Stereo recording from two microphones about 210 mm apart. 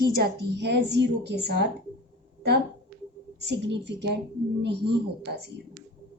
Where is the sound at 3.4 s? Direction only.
55° right (ahead or behind).